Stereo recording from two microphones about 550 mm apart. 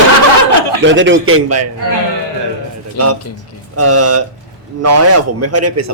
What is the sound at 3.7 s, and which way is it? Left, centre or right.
A man's voice, right.